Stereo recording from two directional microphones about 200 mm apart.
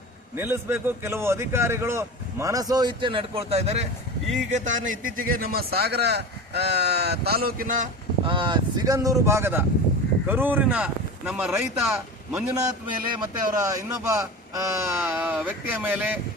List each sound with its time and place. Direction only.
0.3 s a man's voice: 10° right (ahead or behind); by 7.9 s 45° right (ahead or behind)
8.2 s a man's voice: 25° right (ahead or behind); by 11.5 s 5° right (ahead or behind)
11.9 s a man's voice: 15° right (ahead or behind)